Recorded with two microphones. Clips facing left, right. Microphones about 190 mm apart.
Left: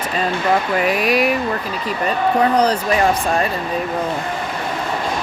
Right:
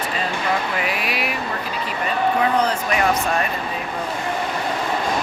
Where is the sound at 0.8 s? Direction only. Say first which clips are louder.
Left 8 dB; 45° left (ahead or behind).